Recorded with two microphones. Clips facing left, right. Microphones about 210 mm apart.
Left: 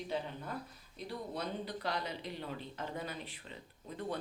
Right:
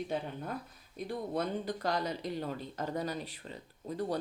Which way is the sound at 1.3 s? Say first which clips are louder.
Right 7 dB; 45° right (ahead or behind).